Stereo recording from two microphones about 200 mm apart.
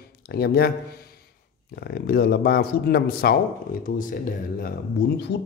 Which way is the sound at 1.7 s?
50° left (ahead or behind).